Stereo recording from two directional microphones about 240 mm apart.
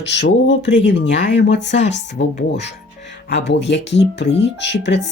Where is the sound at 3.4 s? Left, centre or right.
Left.